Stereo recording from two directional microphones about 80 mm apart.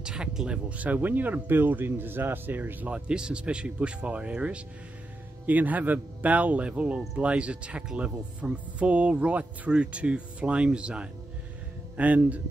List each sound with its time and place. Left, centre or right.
0.0 s speech: centre